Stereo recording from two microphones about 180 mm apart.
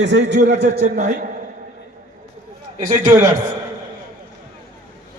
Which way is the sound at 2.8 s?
45° right (ahead or behind).